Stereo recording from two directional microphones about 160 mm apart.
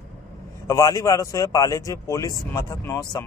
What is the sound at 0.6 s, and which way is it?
A man's voice, 20° left (ahead or behind).